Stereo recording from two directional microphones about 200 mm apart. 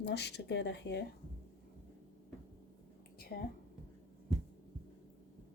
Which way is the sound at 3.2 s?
50° left (ahead or behind).